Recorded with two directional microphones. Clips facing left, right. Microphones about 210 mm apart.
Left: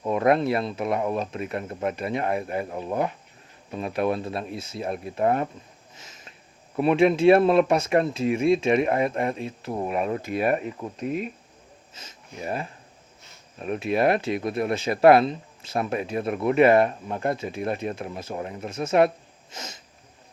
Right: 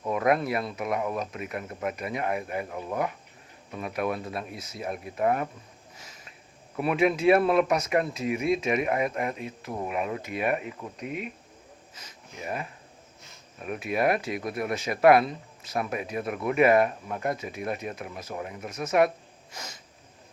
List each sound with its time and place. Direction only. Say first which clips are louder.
0.0 s speech: left 4 dB; 25° left (ahead or behind)
6.0 s a sound: left 2 dB; 25° left (ahead or behind)
6.7 s speech: left 5 dB; 25° left (ahead or behind)